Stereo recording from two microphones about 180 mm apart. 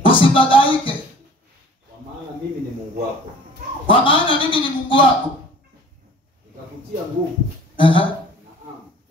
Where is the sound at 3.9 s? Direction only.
30° left (ahead or behind).